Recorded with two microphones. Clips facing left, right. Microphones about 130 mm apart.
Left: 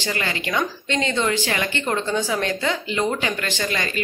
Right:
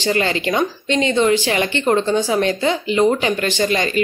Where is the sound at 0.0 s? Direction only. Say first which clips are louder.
Right 8 dB; 25° right (ahead or behind).